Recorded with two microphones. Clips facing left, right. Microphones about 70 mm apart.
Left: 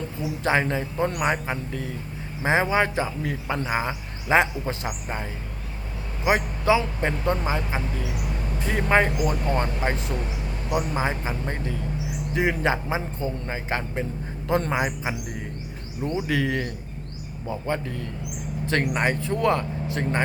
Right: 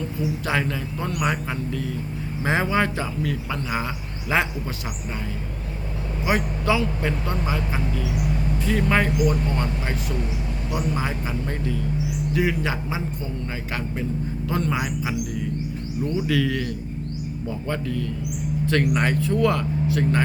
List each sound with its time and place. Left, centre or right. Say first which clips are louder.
0.4 s speech: left 6 dB; left
6.2 s speech: left 1 dB; left
8.6 s a man's voice: left 1 dB; left
18.6 s speech: right 2 dB; left